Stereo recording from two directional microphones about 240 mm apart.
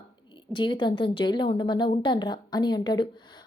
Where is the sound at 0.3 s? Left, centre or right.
Centre.